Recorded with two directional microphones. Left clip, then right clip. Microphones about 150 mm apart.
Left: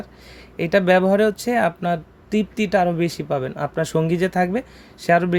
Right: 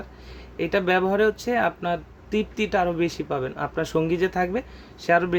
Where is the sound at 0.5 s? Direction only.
45° left (ahead or behind).